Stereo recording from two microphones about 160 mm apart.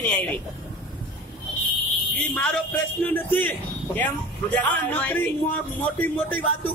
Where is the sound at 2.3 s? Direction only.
10° left (ahead or behind).